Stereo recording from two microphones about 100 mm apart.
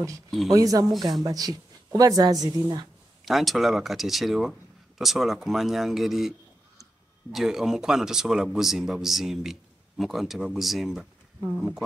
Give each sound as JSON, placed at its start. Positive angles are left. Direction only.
{"t": 0.5, "sound": "speech", "side_deg": -35}
{"t": 0.9, "sound": "speech", "side_deg": 0}
{"t": 1.2, "sound": "speech", "side_deg": -40}
{"t": 3.3, "sound": "speech", "side_deg": 0}
{"t": 7.3, "sound": "speech", "side_deg": -5}